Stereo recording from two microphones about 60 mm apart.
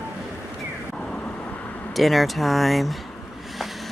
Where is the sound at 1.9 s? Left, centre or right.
Centre.